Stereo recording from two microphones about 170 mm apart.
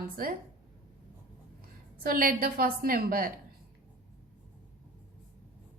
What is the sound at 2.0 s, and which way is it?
A woman's voice, 60° right (ahead or behind).